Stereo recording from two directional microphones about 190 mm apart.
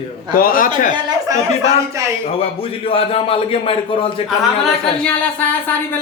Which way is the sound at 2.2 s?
30° left (ahead or behind).